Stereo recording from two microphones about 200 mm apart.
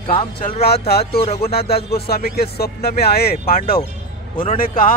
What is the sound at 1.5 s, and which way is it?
Speech, 50° left (ahead or behind).